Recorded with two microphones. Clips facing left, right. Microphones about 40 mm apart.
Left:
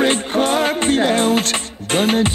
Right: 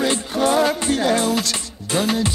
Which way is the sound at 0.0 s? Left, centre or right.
Left.